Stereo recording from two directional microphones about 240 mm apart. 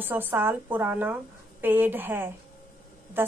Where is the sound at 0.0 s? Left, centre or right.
Centre.